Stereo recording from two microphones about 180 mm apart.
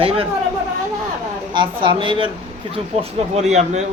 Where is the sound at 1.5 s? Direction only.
25° right (ahead or behind).